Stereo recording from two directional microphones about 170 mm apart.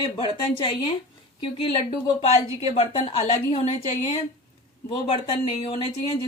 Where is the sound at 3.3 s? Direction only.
35° left (ahead or behind).